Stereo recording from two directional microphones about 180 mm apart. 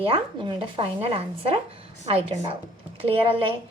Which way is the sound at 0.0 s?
30° right (ahead or behind).